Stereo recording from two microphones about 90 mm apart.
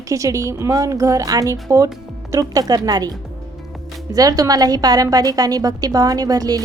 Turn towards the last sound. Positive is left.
turn(degrees=-45)  # may be behind; listen again after turning